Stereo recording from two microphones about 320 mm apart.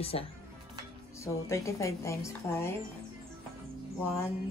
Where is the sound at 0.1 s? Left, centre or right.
Centre.